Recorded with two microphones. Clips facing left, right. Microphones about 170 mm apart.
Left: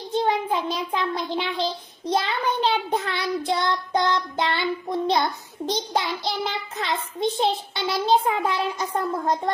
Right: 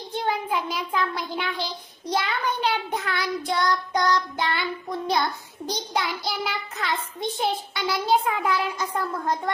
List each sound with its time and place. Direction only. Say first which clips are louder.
0.1 s a child's voice: left 4 dB; 25° left (ahead or behind)
3.5 s child singing: right 2 dB; 25° left (ahead or behind)